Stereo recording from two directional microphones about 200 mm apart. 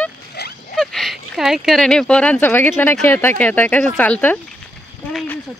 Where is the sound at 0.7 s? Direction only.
Centre (ahead or behind).